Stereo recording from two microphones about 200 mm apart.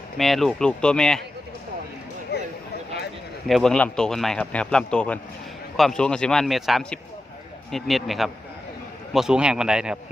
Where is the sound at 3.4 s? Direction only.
Centre (ahead or behind).